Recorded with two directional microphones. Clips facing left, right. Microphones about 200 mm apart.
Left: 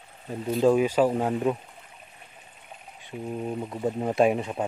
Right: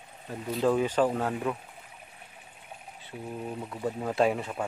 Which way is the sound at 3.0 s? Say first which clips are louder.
Left 5 dB; 20° left (ahead or behind).